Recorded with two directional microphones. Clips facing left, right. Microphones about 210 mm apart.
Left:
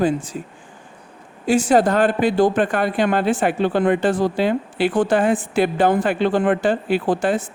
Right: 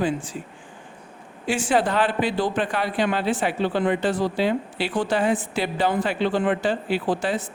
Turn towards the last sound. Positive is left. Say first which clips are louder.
# left 5 dB
turn(degrees=50)  # may be behind; listen again after turning